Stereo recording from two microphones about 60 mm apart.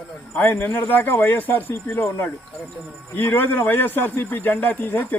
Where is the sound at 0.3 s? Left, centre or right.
Left.